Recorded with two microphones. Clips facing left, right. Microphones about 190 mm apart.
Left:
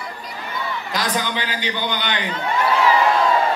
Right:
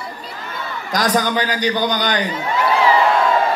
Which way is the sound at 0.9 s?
45° right (ahead or behind).